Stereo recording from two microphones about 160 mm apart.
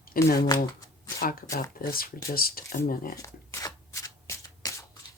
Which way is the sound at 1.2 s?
65° left (ahead or behind).